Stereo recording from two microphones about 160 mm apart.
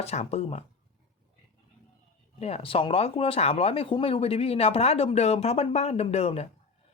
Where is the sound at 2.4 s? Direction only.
40° left (ahead or behind).